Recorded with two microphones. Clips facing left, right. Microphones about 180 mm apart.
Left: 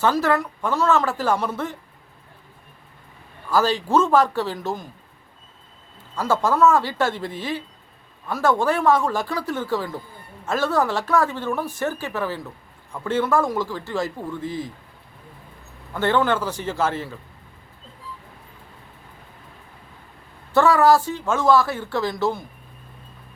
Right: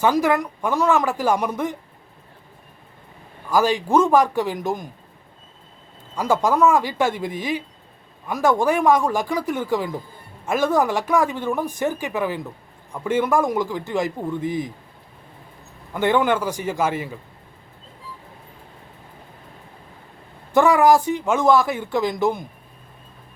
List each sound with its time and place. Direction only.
0.0 s speech: 15° right (ahead or behind)
3.5 s speech: 15° right (ahead or behind)
6.1 s speech: 15° right (ahead or behind)
15.9 s speech: 15° right (ahead or behind)
20.5 s speech: 15° right (ahead or behind)